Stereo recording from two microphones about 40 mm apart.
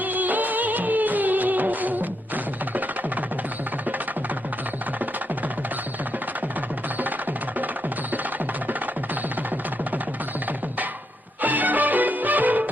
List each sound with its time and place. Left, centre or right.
0.0 s music of bollywood: right
11.4 s music: right